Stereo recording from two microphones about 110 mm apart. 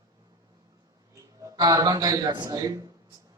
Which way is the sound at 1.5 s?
35° right (ahead or behind).